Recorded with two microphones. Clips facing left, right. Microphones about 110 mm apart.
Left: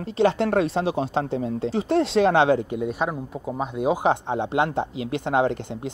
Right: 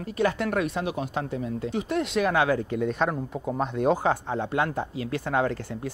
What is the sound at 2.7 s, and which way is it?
Speech, 10° left (ahead or behind).